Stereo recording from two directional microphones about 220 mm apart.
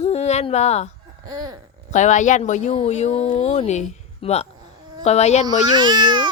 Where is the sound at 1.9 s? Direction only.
35° left (ahead or behind).